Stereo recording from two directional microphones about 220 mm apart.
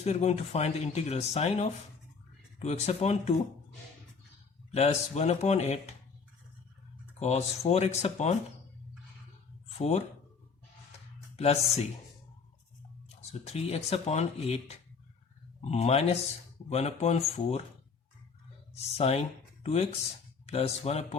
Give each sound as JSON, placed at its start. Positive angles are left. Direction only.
{"t": 0.0, "sound": "speech", "side_deg": 30}
{"t": 4.7, "sound": "speech", "side_deg": 30}
{"t": 7.2, "sound": "speech", "side_deg": 30}
{"t": 9.7, "sound": "speech", "side_deg": 30}
{"t": 13.4, "sound": "speech", "side_deg": 30}
{"t": 18.7, "sound": "speech", "side_deg": 30}